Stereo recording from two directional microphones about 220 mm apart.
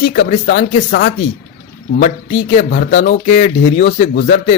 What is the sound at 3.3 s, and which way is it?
A woman's voice, 30° left (ahead or behind).